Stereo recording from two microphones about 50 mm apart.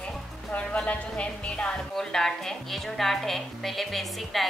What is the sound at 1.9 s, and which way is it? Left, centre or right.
A woman's voice, centre.